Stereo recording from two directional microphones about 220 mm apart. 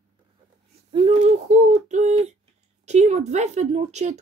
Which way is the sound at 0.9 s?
25° right (ahead or behind).